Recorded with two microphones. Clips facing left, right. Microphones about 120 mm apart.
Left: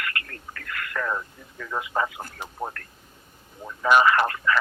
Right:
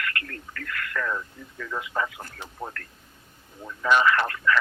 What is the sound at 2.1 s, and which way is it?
Radio, 10° left (ahead or behind).